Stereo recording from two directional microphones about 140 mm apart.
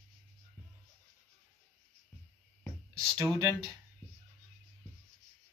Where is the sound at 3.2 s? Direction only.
25° right (ahead or behind).